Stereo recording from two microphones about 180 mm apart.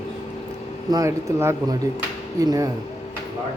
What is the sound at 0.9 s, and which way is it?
A man's voice, 20° right (ahead or behind).